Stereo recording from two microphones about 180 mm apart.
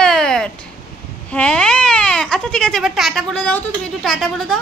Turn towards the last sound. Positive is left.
turn(degrees=0)  # may be behind; listen again after turning